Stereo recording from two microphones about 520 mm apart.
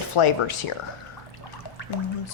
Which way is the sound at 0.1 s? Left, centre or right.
Left.